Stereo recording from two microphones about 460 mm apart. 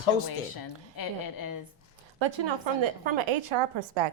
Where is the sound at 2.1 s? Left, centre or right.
Right.